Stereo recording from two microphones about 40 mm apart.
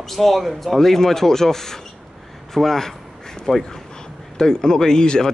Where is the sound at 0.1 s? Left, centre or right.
Centre.